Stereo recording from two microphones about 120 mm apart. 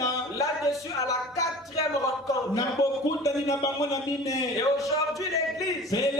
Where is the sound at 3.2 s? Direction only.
30° left (ahead or behind).